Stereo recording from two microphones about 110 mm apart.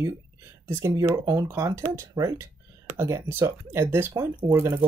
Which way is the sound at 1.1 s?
30° right (ahead or behind).